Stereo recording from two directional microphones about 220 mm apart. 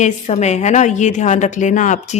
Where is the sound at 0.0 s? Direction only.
30° left (ahead or behind).